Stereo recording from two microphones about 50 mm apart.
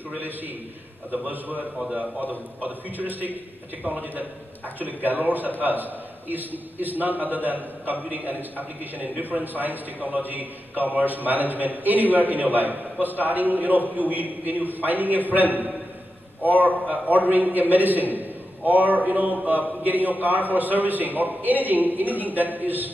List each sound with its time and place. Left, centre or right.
1.2 s a man's voice: right
16.8 s a man's voice: right